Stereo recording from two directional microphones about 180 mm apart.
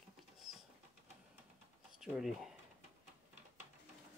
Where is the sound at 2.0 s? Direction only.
5° right (ahead or behind).